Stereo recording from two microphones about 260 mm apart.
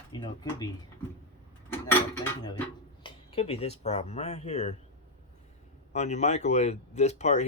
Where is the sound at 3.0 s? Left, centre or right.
Left.